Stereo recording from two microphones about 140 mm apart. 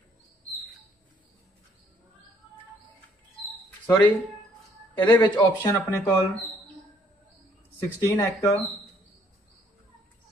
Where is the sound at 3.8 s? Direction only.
10° left (ahead or behind).